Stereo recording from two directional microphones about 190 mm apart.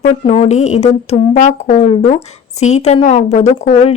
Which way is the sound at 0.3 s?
35° left (ahead or behind).